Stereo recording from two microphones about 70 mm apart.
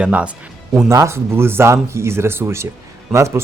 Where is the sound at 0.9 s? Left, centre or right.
Right.